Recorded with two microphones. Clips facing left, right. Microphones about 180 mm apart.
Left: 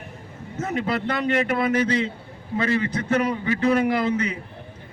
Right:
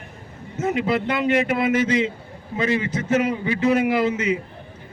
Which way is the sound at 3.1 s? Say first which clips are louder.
Right 2 dB; 40° left (ahead or behind).